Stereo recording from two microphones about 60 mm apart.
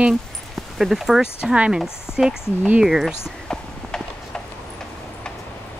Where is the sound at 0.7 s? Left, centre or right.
Centre.